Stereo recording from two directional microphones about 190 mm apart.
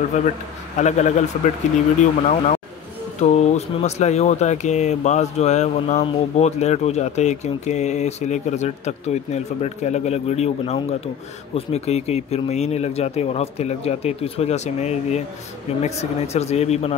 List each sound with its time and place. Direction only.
0.7 s speech: 40° left (ahead or behind)